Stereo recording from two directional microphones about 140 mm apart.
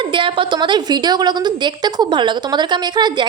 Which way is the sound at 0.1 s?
35° right (ahead or behind).